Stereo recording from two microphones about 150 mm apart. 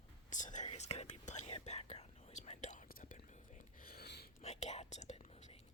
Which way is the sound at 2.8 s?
70° left (ahead or behind).